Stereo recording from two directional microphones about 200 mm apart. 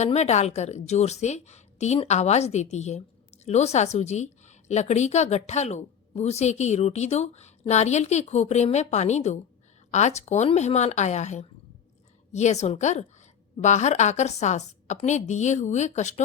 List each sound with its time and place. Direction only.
0.0 s a woman's voice: 35° left (ahead or behind)